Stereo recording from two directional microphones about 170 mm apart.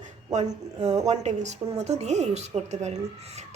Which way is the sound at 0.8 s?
20° right (ahead or behind).